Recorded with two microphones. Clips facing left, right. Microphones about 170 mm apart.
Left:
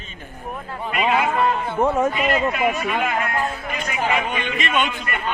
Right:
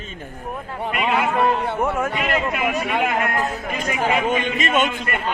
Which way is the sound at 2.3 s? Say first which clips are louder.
Left 2 dB; 5° right (ahead or behind).